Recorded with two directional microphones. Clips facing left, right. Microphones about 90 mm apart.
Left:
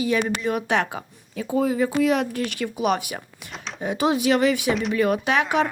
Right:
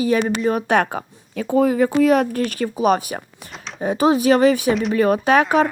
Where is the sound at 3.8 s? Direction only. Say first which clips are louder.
Right 5 dB; 40° right (ahead or behind).